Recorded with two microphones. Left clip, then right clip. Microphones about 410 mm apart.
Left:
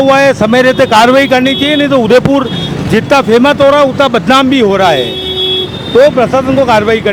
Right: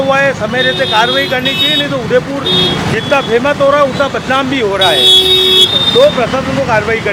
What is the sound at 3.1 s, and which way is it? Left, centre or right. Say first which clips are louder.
Speech: left 4 dB; left.